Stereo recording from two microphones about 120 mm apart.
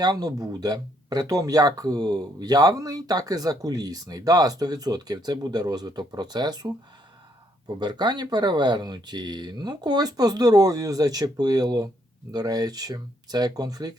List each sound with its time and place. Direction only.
0.0 s speech: 35° right (ahead or behind)
7.8 s speech: 35° right (ahead or behind)